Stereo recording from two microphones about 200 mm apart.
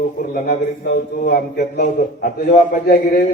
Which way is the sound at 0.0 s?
45° left (ahead or behind).